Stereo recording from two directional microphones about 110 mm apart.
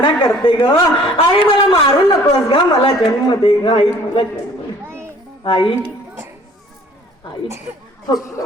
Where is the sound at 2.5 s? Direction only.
55° left (ahead or behind).